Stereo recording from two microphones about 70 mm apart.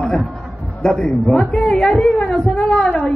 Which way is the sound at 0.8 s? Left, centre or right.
Centre.